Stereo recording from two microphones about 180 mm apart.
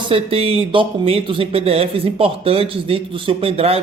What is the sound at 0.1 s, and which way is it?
A man's voice, 30° right (ahead or behind).